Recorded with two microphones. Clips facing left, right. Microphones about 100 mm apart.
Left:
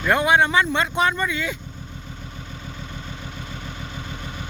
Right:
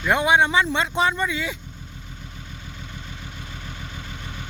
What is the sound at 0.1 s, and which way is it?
Speech, 20° right (ahead or behind).